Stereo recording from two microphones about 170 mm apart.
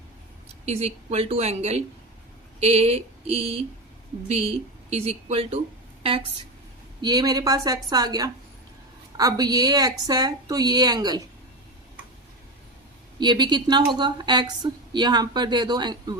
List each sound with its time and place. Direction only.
0.6 s speech: 40° right (ahead or behind)
4.9 s speech: 40° right (ahead or behind)
7.0 s a woman's voice: 25° right (ahead or behind)
13.1 s a woman's voice: 25° right (ahead or behind)